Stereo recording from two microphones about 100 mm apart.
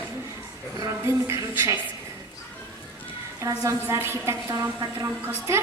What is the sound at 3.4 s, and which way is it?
A woman's voice, 30° right (ahead or behind).